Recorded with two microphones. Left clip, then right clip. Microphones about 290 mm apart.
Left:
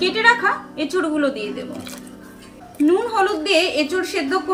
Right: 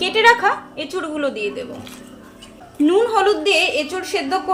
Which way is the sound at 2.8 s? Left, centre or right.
Right.